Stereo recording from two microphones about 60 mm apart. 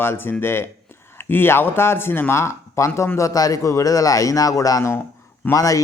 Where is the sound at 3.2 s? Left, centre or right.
Left.